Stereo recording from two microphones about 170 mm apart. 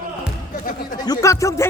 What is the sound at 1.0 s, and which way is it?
Speech, 20° left (ahead or behind).